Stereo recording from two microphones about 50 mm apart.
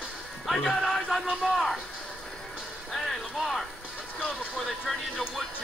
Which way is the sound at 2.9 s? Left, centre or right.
Centre.